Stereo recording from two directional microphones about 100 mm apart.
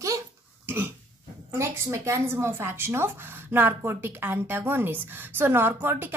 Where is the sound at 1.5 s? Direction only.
30° right (ahead or behind).